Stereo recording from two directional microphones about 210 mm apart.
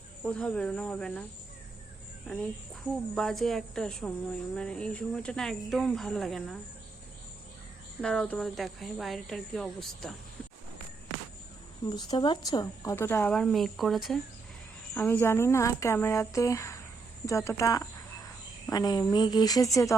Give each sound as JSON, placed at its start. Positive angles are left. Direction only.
{"t": 0.3, "sound": "speech", "side_deg": 5}
{"t": 2.8, "sound": "speech", "side_deg": 0}
{"t": 8.0, "sound": "speech", "side_deg": 5}
{"t": 11.9, "sound": "speech", "side_deg": 20}